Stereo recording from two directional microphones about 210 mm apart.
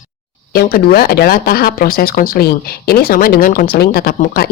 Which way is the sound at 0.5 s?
45° left (ahead or behind).